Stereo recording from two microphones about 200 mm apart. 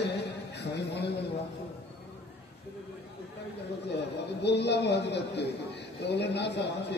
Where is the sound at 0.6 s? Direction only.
55° left (ahead or behind).